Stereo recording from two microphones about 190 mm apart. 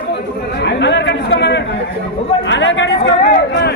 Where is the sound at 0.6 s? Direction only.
65° left (ahead or behind).